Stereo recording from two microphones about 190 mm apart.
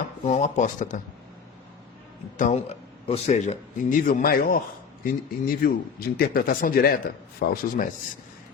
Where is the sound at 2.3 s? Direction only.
40° left (ahead or behind).